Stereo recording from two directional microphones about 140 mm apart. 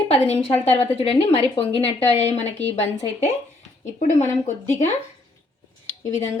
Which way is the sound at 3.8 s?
60° left (ahead or behind).